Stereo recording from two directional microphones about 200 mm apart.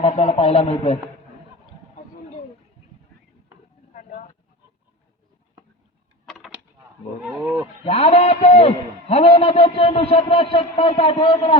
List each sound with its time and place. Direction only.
0.0 s a man's voice: 35° left (ahead or behind)
3.9 s vehicle: 40° left (ahead or behind)
6.2 s a sound: centre (ahead or behind)
7.3 s speech: 5° right (ahead or behind)
7.9 s a man's voice: 30° left (ahead or behind)